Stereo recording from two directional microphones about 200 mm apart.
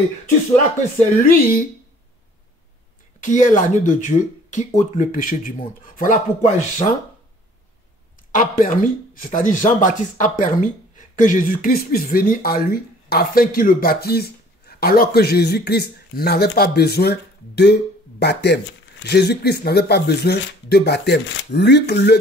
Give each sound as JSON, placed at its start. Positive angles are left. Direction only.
{"t": 0.9, "sound": "speech", "side_deg": 45}
{"t": 3.2, "sound": "speech", "side_deg": 40}
{"t": 8.3, "sound": "speech", "side_deg": 40}